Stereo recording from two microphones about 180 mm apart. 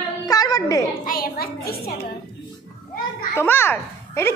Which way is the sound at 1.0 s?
55° left (ahead or behind).